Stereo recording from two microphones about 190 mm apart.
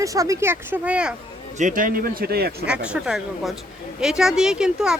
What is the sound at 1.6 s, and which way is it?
Speech, 45° right (ahead or behind).